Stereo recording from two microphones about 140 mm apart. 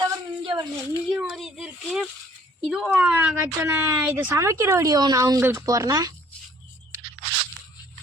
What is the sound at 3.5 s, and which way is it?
Speech, 20° right (ahead or behind).